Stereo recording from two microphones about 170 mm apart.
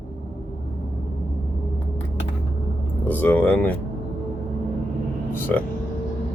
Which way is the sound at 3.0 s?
10° left (ahead or behind).